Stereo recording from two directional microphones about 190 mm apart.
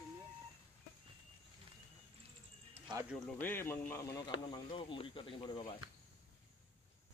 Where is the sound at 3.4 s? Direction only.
10° left (ahead or behind); by 5.6 s 25° left (ahead or behind).